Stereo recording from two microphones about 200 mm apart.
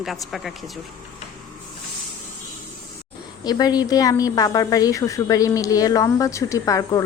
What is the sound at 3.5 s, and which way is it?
A woman's voice, 20° left (ahead or behind).